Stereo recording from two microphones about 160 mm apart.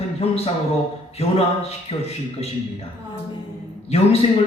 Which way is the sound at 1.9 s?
35° left (ahead or behind).